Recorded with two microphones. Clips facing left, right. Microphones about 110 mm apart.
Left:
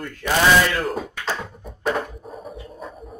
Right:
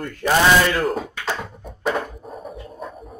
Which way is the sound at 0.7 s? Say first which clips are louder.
Right 3 dB; centre (ahead or behind).